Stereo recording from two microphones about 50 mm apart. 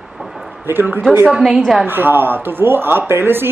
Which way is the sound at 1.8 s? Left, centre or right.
Right.